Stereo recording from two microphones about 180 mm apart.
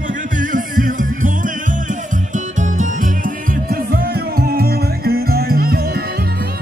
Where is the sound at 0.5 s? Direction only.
50° right (ahead or behind).